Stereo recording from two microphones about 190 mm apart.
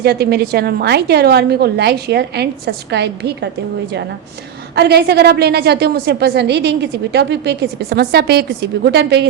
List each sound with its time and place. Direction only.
0.0 s a woman's voice: 55° right (ahead or behind)
4.7 s a woman's voice: 55° right (ahead or behind)